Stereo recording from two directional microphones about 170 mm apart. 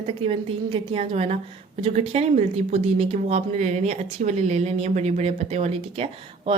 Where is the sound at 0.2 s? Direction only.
35° right (ahead or behind).